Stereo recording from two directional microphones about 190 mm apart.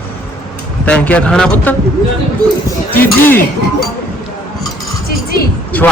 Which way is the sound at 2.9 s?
10° left (ahead or behind).